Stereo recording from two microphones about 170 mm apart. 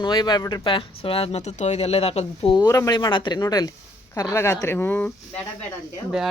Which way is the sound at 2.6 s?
20° left (ahead or behind).